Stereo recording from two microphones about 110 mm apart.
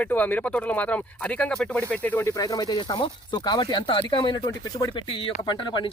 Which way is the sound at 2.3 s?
35° left (ahead or behind).